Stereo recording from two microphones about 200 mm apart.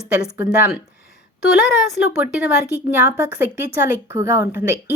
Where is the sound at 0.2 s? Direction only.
5° right (ahead or behind).